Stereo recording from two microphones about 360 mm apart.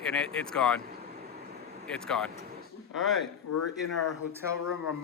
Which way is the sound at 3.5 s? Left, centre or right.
Left.